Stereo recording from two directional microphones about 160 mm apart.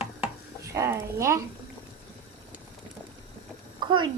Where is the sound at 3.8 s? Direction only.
30° right (ahead or behind).